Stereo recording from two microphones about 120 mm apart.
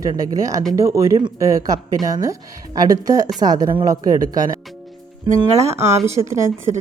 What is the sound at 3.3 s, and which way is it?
Speech, 35° right (ahead or behind).